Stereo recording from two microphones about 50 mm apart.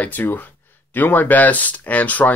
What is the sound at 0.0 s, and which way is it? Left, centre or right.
Speech, left.